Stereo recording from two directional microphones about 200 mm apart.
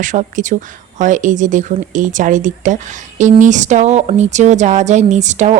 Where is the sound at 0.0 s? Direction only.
40° right (ahead or behind).